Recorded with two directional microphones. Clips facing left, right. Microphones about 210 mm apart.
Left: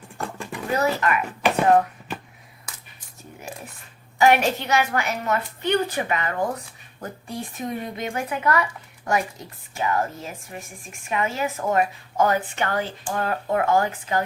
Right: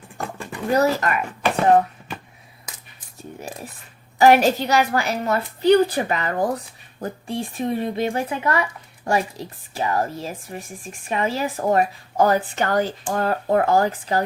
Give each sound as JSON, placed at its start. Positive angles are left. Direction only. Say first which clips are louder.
{"t": 0.1, "sound": "a sound", "louder": "right 1 dB", "side_deg": 0}
{"t": 0.7, "sound": "speech", "louder": "right 4 dB", "side_deg": -40}
{"t": 4.2, "sound": "a woman's voice", "louder": "right 4 dB", "side_deg": -35}